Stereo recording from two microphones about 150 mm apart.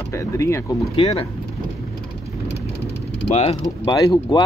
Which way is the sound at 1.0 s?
40° left (ahead or behind).